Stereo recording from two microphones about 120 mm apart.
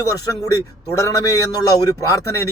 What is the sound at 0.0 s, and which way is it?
A man's voice, 25° left (ahead or behind).